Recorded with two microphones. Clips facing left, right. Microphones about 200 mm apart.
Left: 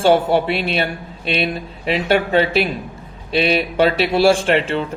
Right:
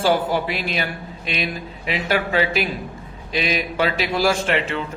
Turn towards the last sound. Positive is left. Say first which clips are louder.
# left 5 dB
turn(degrees=30)  # may be behind; listen again after turning